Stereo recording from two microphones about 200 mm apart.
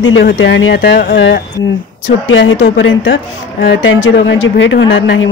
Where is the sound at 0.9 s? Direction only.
45° left (ahead or behind).